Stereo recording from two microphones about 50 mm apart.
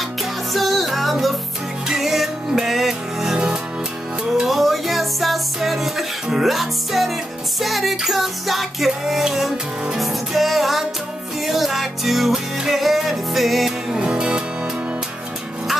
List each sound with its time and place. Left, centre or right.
0.2 s music: centre
13.9 s music: centre